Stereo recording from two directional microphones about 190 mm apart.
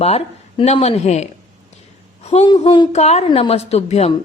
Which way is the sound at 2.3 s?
30° left (ahead or behind).